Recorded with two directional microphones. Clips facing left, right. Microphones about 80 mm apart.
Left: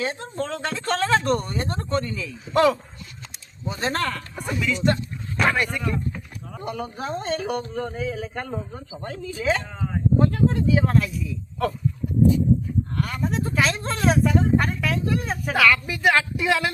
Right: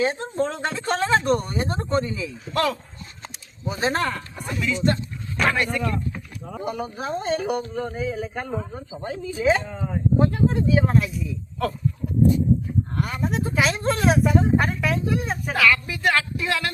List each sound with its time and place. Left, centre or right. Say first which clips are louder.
0.0 s speech: right 5 dB; centre
2.4 s speech: left 5 dB; centre
3.6 s speech: right 2 dB; centre
4.4 s speech: left 2 dB; centre
5.4 s a sound: left 1 dB; centre
6.6 s speech: right 1 dB; centre
10.2 s speech: even; centre
10.8 s speech: right 1 dB; centre
13.0 s speech: right 1 dB; centre
13.2 s speech: right 1 dB; centre
15.1 s speech: left 1 dB; centre